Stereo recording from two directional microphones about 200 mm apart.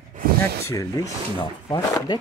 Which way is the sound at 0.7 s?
15° left (ahead or behind).